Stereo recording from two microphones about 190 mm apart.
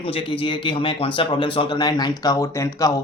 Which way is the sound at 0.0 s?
30° left (ahead or behind).